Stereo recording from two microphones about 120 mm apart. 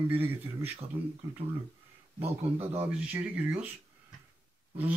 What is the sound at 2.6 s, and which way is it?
Speech, 15° right (ahead or behind).